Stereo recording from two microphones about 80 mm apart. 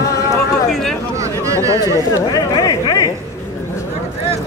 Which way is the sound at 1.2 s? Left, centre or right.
Right.